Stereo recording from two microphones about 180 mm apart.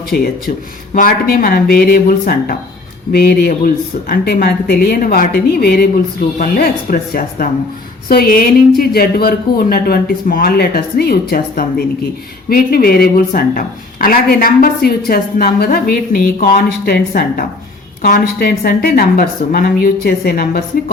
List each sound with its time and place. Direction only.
0.1 s speech: 55° left (ahead or behind)